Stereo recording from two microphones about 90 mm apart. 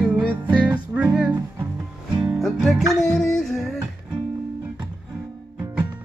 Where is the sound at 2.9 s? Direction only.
Centre (ahead or behind).